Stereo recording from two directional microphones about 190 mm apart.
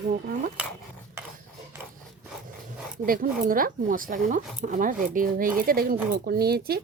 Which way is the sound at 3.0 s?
50° right (ahead or behind).